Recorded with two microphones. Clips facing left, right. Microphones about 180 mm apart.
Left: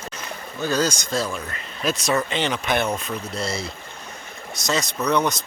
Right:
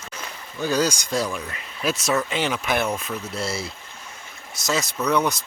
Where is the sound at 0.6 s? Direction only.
10° right (ahead or behind).